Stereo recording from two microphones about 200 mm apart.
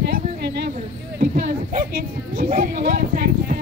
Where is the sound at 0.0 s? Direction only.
55° right (ahead or behind).